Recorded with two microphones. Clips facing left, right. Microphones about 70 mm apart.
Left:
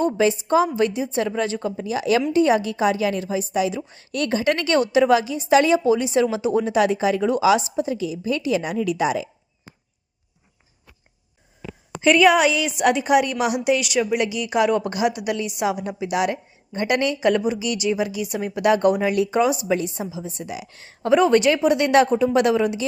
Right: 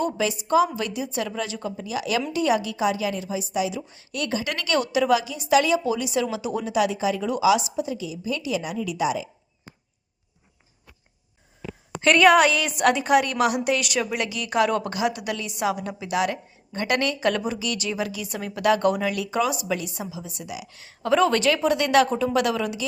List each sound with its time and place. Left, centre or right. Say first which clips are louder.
0.0 s a woman's voice: left 6 dB; left
11.9 s a woman's voice: left 1 dB; centre; by 21.1 s left
21.1 s a woman's voice: left 4 dB; centre